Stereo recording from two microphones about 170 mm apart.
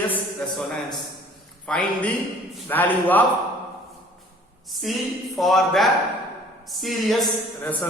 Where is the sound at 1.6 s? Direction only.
5° left (ahead or behind).